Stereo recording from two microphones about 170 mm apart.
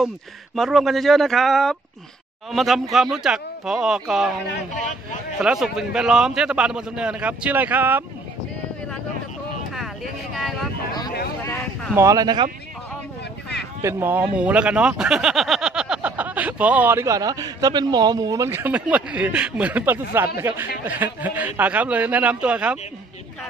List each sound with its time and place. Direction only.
0.6 s a man's voice: centre (ahead or behind)
5.4 s a man's voice: 5° right (ahead or behind)
11.9 s speech: 20° right (ahead or behind)
13.8 s speech: 15° right (ahead or behind)